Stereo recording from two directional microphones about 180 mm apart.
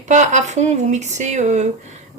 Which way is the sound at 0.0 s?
40° right (ahead or behind).